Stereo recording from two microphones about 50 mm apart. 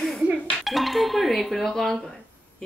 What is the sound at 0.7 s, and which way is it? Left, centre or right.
Speech, centre.